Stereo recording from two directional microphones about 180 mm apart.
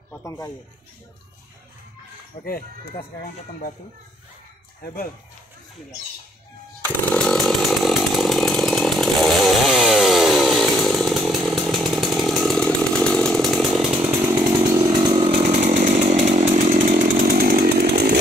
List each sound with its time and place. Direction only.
0.2 s speech: 15° left (ahead or behind)
2.3 s speech: 40° left (ahead or behind)
6.8 s chainsaw: 5° left (ahead or behind); by 18.2 s 65° right (ahead or behind)